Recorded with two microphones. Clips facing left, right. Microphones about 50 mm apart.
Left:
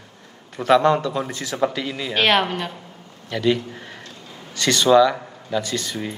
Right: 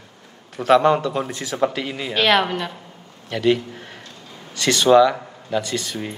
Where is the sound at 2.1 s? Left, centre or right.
Centre.